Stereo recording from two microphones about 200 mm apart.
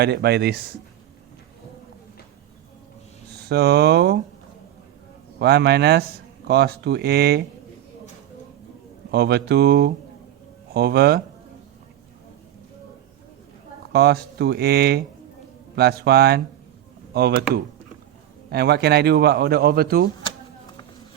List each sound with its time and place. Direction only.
0.0 s speech: 55° right (ahead or behind)
3.5 s speech: 55° right (ahead or behind)
5.4 s speech: 55° right (ahead or behind)
9.1 s speech: 55° right (ahead or behind)
13.9 s speech: 50° right (ahead or behind)
18.5 s speech: 55° right (ahead or behind)